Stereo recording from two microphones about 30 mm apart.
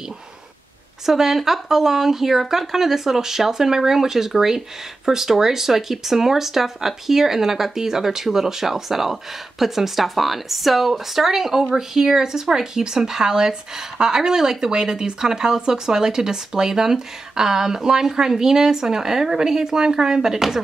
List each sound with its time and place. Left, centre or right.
1.0 s speech: centre